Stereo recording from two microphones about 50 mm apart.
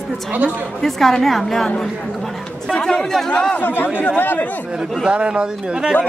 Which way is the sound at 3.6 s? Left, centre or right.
Left.